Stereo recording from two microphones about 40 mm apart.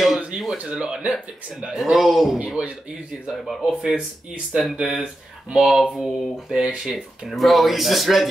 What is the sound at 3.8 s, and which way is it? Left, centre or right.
Speech, right.